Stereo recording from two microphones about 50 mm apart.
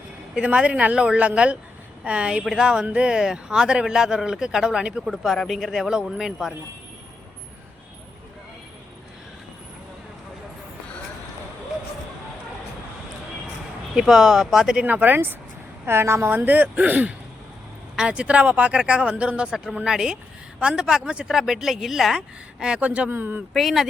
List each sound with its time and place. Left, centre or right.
0.4 s speech: right
5.0 s speech: centre
13.9 s speech: centre
14.8 s speech: right
15.9 s speech: right
17.9 s speech: centre
19.5 s speech: centre
22.8 s speech: right
23.0 s speech: right
23.6 s speech: centre